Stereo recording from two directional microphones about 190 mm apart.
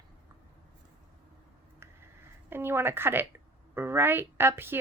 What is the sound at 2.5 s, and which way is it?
Speech, 10° right (ahead or behind).